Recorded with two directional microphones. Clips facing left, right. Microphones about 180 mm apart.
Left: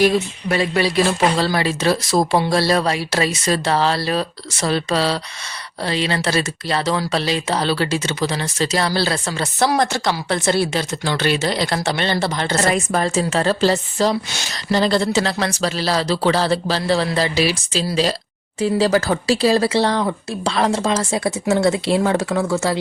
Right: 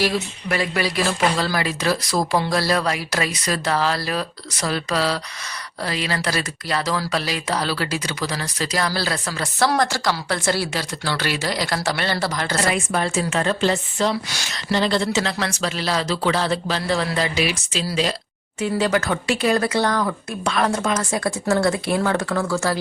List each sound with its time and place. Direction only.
0.0 s speech: 25° left (ahead or behind)
12.7 s speech: 35° left (ahead or behind); by 22.8 s 20° left (ahead or behind)